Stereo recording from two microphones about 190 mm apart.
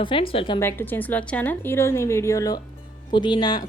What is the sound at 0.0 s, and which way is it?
Speech, 25° left (ahead or behind).